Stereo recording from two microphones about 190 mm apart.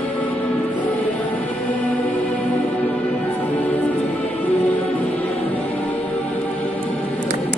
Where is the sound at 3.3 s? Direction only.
10° left (ahead or behind).